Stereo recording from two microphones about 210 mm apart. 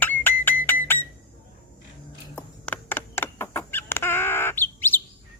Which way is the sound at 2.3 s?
10° left (ahead or behind).